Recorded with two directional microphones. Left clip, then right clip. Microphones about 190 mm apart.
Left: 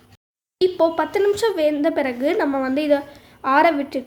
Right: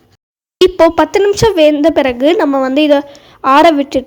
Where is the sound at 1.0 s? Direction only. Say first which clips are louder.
Right 9 dB; 40° right (ahead or behind).